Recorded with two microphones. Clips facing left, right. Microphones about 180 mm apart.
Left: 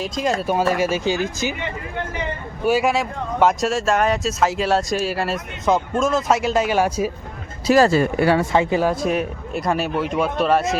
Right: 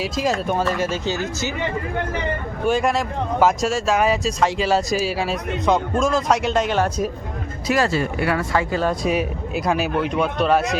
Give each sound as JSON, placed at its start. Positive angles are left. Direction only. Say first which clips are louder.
{"t": 0.0, "sound": "speech", "louder": "even", "side_deg": 0}
{"t": 2.6, "sound": "speech", "louder": "left 1 dB", "side_deg": 5}
{"t": 7.7, "sound": "speech", "louder": "left 5 dB", "side_deg": 40}
{"t": 8.4, "sound": "speech", "louder": "left 3 dB", "side_deg": 20}
{"t": 8.9, "sound": "speech", "louder": "even", "side_deg": 0}